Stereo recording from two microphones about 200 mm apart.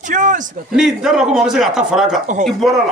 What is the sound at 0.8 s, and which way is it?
A man's voice, centre (ahead or behind).